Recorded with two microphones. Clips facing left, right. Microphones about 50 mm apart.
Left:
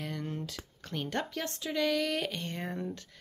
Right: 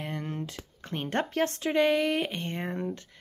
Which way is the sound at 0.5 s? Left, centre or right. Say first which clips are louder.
Right 3 dB; right.